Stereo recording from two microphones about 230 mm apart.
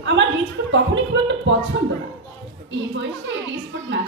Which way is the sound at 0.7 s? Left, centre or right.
Right.